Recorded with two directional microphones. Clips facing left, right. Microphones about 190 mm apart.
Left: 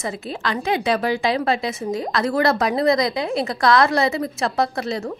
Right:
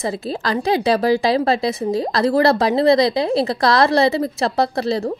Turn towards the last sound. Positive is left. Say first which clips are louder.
# right 4 dB
turn(degrees=-35)  # may be behind; listen again after turning